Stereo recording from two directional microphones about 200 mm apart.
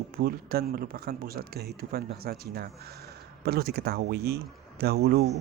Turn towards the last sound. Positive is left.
turn(degrees=-55)  # may be behind; listen again after turning